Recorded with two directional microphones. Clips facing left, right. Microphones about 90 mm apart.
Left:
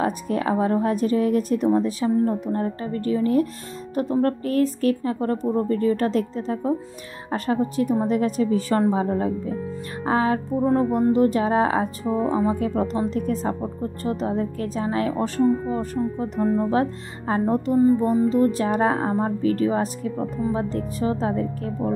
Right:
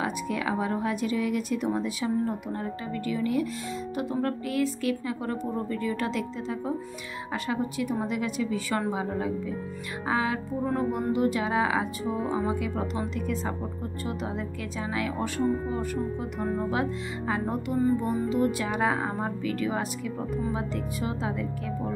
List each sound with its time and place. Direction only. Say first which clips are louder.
0.0 s speech: left 6 dB; 40° left (ahead or behind)
10.0 s music: left 6 dB; 40° left (ahead or behind)
10.6 s speech: left 8 dB; 35° left (ahead or behind)
17.7 s music: left 7 dB; 25° left (ahead or behind)
18.0 s speech: left 7 dB; 40° left (ahead or behind)